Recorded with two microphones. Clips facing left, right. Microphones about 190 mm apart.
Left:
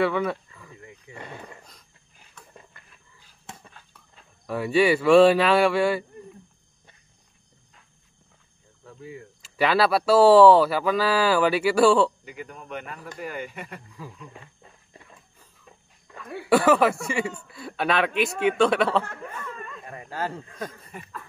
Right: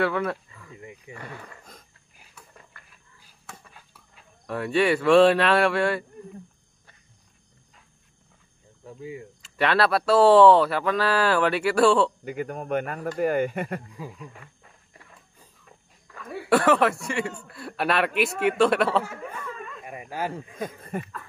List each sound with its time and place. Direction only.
0.0 s speech: centre (ahead or behind)
0.7 s wild animals: 20° right (ahead or behind)
1.1 s speech: 20° left (ahead or behind)
2.4 s a sound: 5° right (ahead or behind)
2.8 s wild animals: 20° left (ahead or behind)
4.5 s speech: centre (ahead or behind)
8.8 s speech: 15° right (ahead or behind)
9.4 s speech: centre (ahead or behind)
12.3 s speech: 50° right (ahead or behind)
16.3 s speech: centre (ahead or behind)
19.5 s a sound: centre (ahead or behind)
19.8 s speech: 15° right (ahead or behind)
20.9 s speech: 55° right (ahead or behind)